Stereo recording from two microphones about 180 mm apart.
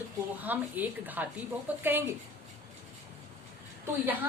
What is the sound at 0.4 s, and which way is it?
A woman's voice, 10° right (ahead or behind).